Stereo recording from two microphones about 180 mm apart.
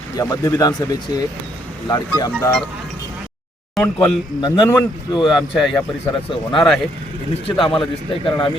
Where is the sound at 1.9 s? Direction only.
20° left (ahead or behind).